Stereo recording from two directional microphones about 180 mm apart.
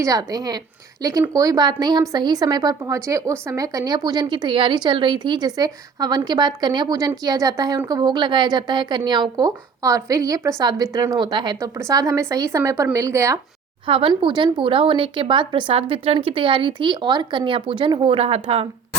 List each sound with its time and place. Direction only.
0.0 s speech: 20° right (ahead or behind)
13.8 s speech: 30° right (ahead or behind)